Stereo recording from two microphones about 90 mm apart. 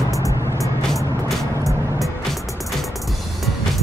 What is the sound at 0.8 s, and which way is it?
Music, centre (ahead or behind).